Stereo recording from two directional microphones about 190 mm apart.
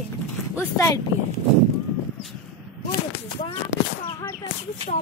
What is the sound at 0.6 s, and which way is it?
Speech, 15° left (ahead or behind).